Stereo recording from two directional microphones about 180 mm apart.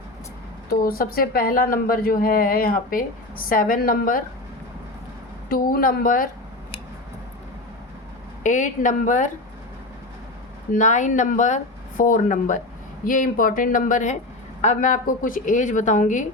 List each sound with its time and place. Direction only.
0.7 s a woman's voice: 55° left (ahead or behind)
5.5 s a woman's voice: 50° left (ahead or behind)
8.4 s a woman's voice: 45° left (ahead or behind)
10.7 s a woman's voice: 45° left (ahead or behind)